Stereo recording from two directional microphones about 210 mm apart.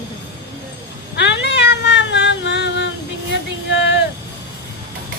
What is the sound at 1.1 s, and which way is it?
Cat, 55° left (ahead or behind).